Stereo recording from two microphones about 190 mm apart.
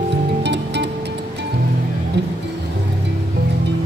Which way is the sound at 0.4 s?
65° right (ahead or behind).